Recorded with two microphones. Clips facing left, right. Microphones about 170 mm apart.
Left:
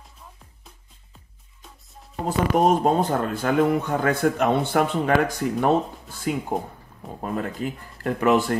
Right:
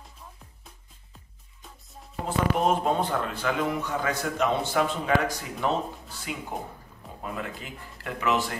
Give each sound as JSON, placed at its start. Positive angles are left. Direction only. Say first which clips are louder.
{"t": 2.2, "sound": "speech", "louder": "left 5 dB", "side_deg": 40}